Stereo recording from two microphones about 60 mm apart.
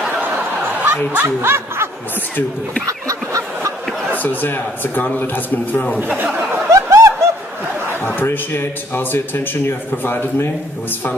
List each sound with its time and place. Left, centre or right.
1.1 s speech: right
2.9 s fowl: right
4.1 s a man's voice: left
5.9 s speech: right
6.7 s snicker: right
8.2 s a man's voice: left